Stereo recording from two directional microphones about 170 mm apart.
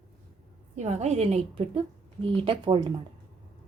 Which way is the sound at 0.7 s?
40° right (ahead or behind).